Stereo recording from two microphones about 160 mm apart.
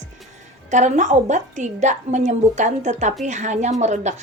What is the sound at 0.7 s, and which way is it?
A woman's voice, 50° right (ahead or behind).